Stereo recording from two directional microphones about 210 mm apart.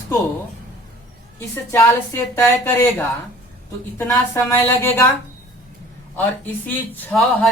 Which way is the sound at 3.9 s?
10° left (ahead or behind).